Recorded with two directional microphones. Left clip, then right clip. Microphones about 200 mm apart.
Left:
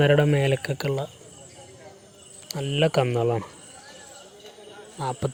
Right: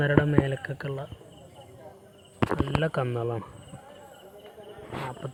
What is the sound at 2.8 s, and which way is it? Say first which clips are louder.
Speech: left 7 dB; 40° left (ahead or behind).